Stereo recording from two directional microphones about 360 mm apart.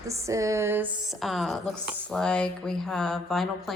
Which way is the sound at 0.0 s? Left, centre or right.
Centre.